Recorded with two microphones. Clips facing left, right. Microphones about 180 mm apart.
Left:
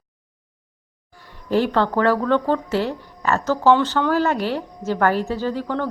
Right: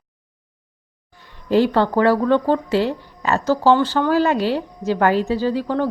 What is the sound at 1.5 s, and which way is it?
A woman's voice, 15° right (ahead or behind).